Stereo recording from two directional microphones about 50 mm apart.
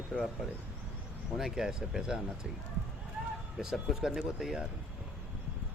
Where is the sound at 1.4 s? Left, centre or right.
Centre.